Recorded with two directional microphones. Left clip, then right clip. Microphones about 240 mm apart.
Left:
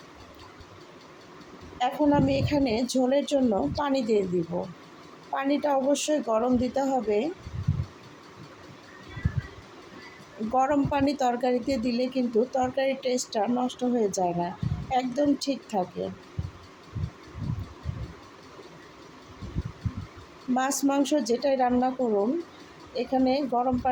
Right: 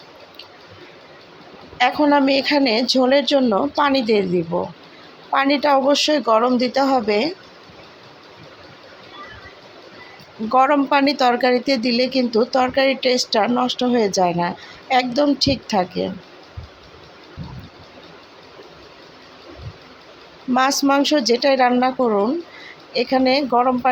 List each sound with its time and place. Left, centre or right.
1.8 s speech: centre
4.5 s speech: right
5.3 s speech: centre
10.5 s speech: centre
20.6 s speech: centre
23.0 s speech: centre